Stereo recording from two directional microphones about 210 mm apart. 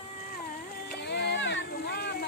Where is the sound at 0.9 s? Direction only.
50° left (ahead or behind).